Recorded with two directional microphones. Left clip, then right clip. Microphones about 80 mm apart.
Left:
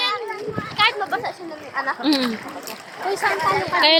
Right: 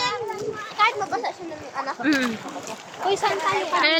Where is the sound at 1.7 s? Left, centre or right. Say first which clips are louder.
Left 5 dB; left.